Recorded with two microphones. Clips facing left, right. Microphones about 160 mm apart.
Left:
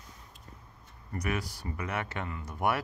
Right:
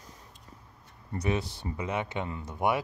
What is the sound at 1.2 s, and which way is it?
Speech, 25° right (ahead or behind).